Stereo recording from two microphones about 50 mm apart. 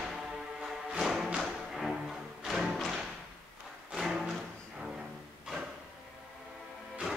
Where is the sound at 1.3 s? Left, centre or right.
Centre.